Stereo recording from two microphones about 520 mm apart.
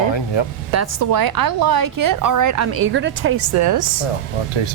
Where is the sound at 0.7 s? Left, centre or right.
Right.